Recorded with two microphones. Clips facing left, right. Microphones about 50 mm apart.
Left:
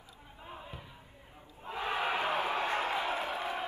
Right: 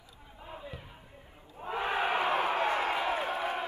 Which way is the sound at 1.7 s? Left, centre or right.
Right.